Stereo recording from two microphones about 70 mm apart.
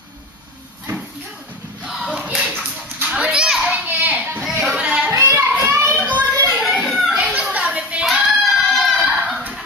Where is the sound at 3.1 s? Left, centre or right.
Centre.